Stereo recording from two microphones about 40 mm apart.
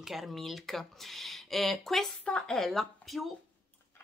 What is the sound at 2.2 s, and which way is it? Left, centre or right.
Speech, left.